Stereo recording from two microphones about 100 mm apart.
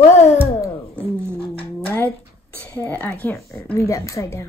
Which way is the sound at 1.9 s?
20° left (ahead or behind).